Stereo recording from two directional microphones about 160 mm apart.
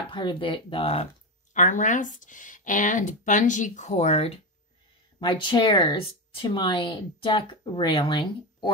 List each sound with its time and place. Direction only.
0.1 s speech: 30° left (ahead or behind)
1.5 s speech: 50° left (ahead or behind)
5.2 s speech: 30° left (ahead or behind)